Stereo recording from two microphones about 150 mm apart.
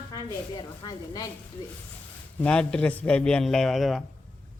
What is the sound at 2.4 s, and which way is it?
Speech, 5° left (ahead or behind).